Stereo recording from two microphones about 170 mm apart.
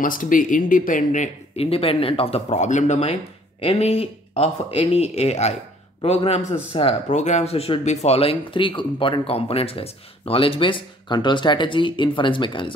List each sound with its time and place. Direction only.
0.0 s a man's voice: 50° left (ahead or behind); by 12.7 s 30° left (ahead or behind)